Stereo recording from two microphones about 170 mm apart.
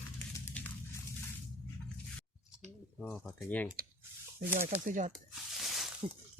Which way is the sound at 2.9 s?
Centre (ahead or behind).